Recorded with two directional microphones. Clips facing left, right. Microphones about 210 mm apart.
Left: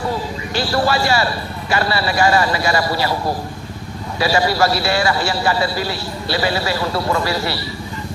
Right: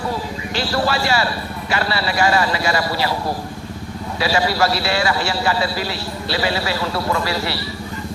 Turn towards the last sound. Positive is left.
turn(degrees=45)  # may be behind; listen again after turning